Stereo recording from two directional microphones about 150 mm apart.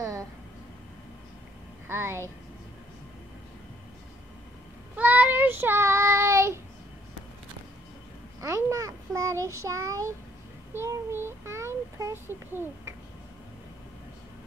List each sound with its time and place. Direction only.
1.9 s speech: 15° right (ahead or behind)
4.9 s child singing: 10° right (ahead or behind)
8.4 s child singing: 20° right (ahead or behind)